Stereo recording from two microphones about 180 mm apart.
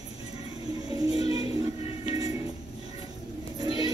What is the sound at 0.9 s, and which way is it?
Music, 20° right (ahead or behind).